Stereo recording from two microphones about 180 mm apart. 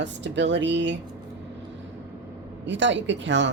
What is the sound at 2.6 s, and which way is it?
Speech, 90° right.